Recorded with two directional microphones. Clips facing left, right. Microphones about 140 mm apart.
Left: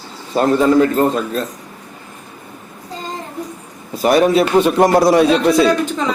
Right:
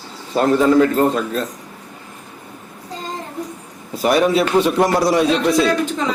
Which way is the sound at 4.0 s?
35° left (ahead or behind).